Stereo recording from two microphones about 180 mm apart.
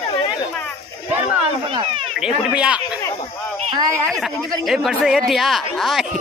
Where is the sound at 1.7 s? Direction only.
30° right (ahead or behind).